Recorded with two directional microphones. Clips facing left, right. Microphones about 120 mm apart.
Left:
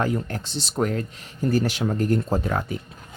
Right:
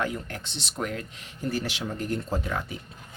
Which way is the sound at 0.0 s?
35° left (ahead or behind).